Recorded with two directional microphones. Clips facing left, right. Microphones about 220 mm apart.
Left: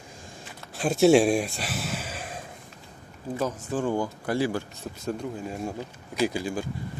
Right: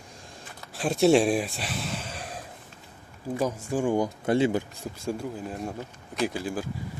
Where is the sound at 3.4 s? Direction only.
10° right (ahead or behind).